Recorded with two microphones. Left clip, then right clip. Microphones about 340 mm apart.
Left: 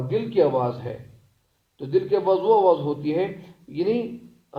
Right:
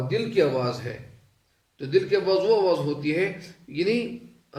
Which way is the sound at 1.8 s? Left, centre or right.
Centre.